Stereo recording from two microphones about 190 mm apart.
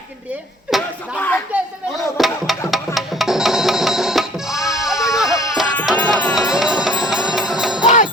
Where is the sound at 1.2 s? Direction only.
10° left (ahead or behind).